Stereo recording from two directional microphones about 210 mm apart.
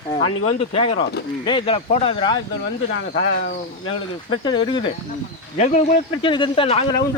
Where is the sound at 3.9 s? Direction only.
25° left (ahead or behind).